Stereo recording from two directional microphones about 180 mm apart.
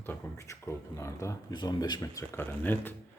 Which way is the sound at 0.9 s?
15° left (ahead or behind).